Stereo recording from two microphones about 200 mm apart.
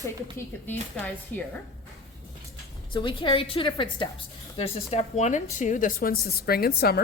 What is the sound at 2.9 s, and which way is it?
A woman's voice, 25° left (ahead or behind).